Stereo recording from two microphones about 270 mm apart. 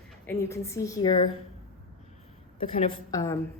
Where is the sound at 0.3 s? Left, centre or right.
Centre.